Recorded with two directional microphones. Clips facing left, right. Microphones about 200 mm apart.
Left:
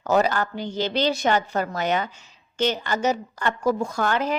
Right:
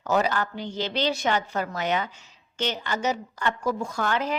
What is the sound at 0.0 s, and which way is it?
A woman's voice, 45° left (ahead or behind).